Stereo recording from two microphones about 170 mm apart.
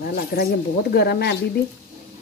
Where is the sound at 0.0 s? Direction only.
65° left (ahead or behind).